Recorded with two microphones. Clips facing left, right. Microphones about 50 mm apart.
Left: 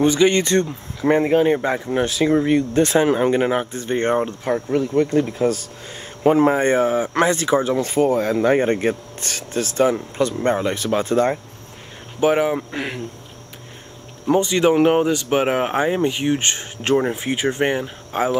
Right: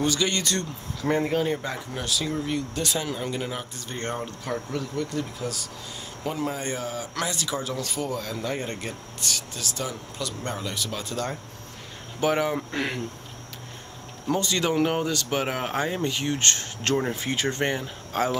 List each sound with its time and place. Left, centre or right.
0.0 s speech: left
12.2 s speech: centre
14.2 s speech: left